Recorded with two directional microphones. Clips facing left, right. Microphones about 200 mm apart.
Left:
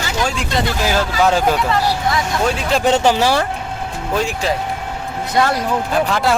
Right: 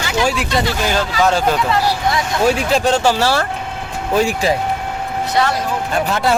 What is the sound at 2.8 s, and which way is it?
Speech, 15° left (ahead or behind).